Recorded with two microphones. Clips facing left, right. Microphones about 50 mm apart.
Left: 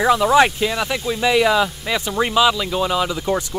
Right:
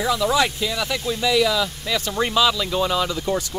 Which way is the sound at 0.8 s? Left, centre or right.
Centre.